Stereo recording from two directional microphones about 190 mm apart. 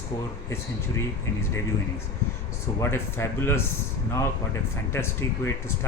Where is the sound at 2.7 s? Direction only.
15° left (ahead or behind).